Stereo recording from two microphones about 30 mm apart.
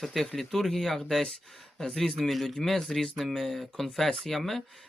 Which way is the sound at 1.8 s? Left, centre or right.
Left.